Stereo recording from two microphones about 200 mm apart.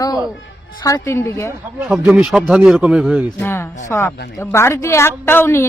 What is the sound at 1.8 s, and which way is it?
Speech, 5° right (ahead or behind).